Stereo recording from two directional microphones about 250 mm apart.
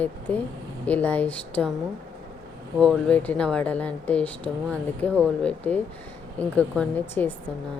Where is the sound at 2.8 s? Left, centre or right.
Centre.